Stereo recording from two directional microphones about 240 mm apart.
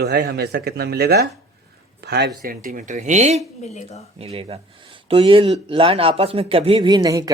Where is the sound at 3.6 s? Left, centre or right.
Left.